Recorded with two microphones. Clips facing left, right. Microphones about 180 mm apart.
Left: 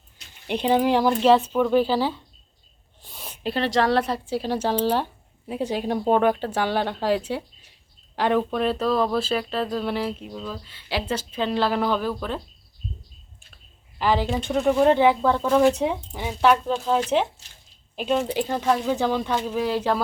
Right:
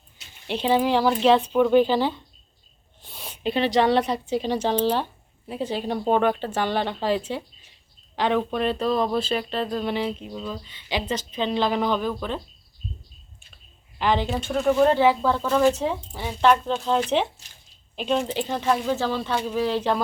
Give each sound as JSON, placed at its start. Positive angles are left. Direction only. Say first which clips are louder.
{"t": 0.4, "sound": "speech", "louder": "left 1 dB", "side_deg": 10}
{"t": 3.2, "sound": "speech", "louder": "right 2 dB", "side_deg": 0}
{"t": 14.0, "sound": "speech", "louder": "left 1 dB", "side_deg": 5}
{"t": 14.4, "sound": "speech", "louder": "left 1 dB", "side_deg": 15}